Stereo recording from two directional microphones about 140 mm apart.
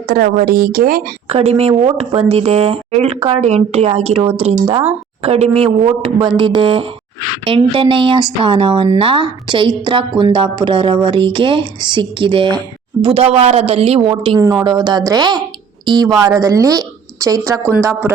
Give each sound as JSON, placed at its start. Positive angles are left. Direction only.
{"t": 0.1, "sound": "a woman's voice", "side_deg": -85}
{"t": 1.3, "sound": "speech", "side_deg": -45}
{"t": 14.1, "sound": "a woman's voice", "side_deg": -35}